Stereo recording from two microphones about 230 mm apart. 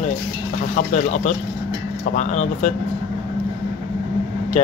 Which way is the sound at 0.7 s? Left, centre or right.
Left.